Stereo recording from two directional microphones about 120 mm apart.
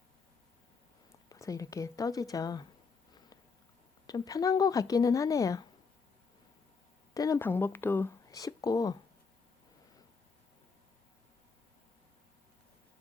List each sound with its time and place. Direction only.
1.3 s speech: 30° left (ahead or behind)
4.0 s speech: 30° left (ahead or behind)
7.1 s speech: 30° left (ahead or behind)
7.3 s speech: 15° left (ahead or behind)
8.3 s speech: 30° left (ahead or behind)